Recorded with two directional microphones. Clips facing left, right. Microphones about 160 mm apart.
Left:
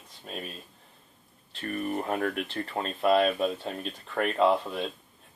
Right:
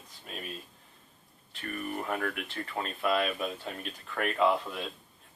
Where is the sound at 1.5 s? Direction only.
35° left (ahead or behind).